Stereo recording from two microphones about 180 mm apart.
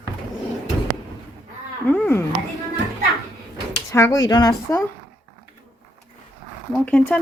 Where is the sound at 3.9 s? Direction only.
15° left (ahead or behind).